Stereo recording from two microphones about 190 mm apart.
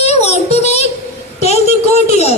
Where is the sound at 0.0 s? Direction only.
35° left (ahead or behind).